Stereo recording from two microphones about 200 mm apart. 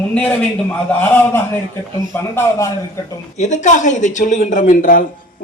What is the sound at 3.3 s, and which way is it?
Speech, 35° left (ahead or behind).